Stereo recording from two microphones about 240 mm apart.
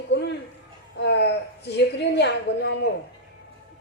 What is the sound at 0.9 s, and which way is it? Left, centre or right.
A woman's voice, left.